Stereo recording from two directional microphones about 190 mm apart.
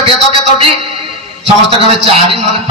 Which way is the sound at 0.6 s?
30° right (ahead or behind).